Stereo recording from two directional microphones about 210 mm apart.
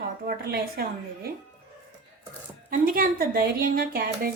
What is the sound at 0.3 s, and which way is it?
Speech, 50° right (ahead or behind).